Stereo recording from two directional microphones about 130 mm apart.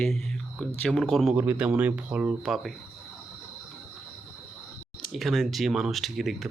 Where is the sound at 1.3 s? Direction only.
10° right (ahead or behind).